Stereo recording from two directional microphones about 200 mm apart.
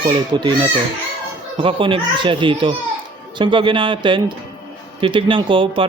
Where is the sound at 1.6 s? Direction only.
25° right (ahead or behind).